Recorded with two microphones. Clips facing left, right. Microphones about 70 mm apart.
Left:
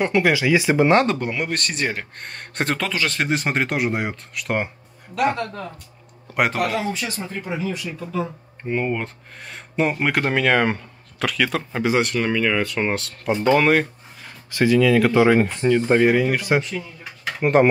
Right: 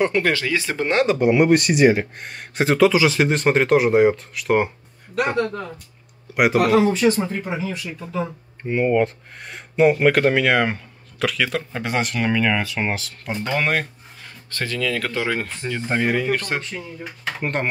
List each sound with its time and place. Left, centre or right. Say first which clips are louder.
0.0 s speech: left 1 dB; centre
0.8 s speech: even; centre
1.3 s speech: right 10 dB; centre
7.0 s speech: right 13 dB; right
7.5 s speech: left 1 dB; centre